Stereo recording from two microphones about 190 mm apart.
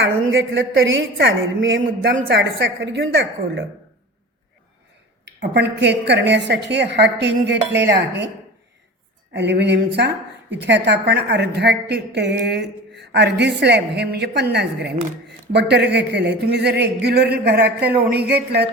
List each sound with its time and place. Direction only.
0.3 s a woman's voice: 80° right
2.1 s a woman's voice: 50° right (ahead or behind)
2.4 s a woman's voice: 75° right (ahead or behind)
5.2 s a woman's voice: 65° right (ahead or behind)
9.3 s a woman's voice: 65° right (ahead or behind)